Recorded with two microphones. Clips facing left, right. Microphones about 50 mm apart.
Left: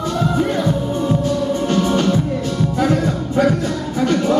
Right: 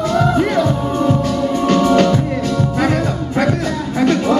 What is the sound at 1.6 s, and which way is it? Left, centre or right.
Music, right.